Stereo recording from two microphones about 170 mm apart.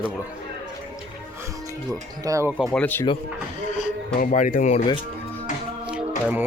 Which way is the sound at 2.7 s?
10° left (ahead or behind).